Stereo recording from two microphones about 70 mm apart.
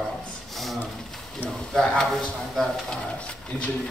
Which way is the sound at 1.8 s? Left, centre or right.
Centre.